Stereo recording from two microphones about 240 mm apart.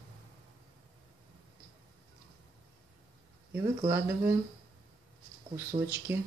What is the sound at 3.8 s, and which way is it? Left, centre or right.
Speech, centre.